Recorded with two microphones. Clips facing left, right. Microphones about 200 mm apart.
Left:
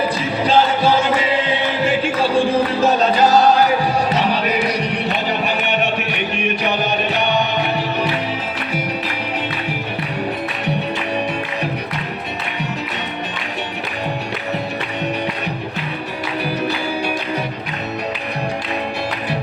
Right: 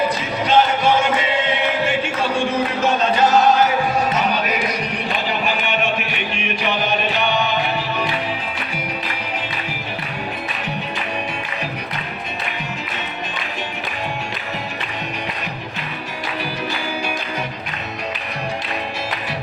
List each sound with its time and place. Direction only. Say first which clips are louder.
0.4 s music: left 1 dB; 35° left (ahead or behind)
7.1 s music: left 2 dB; 65° left (ahead or behind)